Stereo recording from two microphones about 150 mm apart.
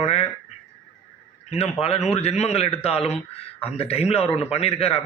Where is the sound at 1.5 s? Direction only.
40° left (ahead or behind).